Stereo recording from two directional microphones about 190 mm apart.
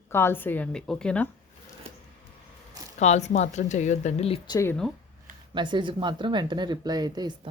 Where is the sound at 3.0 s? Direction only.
35° left (ahead or behind).